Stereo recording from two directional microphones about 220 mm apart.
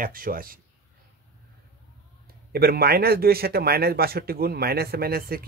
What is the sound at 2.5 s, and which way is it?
Speech, 45° right (ahead or behind).